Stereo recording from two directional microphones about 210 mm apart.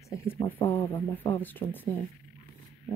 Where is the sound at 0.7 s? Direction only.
10° left (ahead or behind).